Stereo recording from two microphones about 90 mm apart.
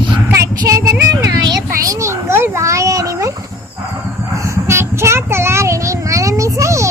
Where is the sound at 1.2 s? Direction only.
40° right (ahead or behind).